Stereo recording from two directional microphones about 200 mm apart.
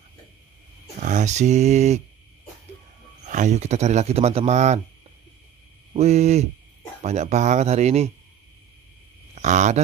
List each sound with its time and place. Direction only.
1.0 s speech: 35° right (ahead or behind)
3.3 s speech: 35° right (ahead or behind)
5.9 s speech: 35° right (ahead or behind)
9.3 s speech: 35° right (ahead or behind)